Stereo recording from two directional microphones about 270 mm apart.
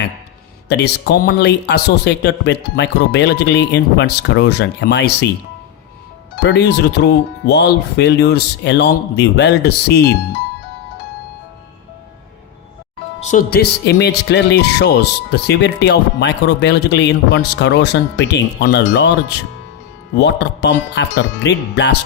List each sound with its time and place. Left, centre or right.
0.7 s speech: left
6.4 s speech: left
13.1 s speech: left